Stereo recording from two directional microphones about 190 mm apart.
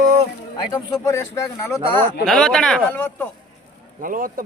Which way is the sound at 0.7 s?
15° left (ahead or behind).